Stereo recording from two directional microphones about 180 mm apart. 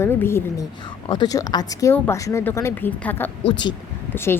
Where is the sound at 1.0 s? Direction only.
25° left (ahead or behind).